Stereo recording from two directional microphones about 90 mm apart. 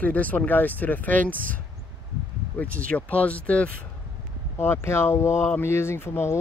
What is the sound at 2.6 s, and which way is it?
Speech, 15° left (ahead or behind).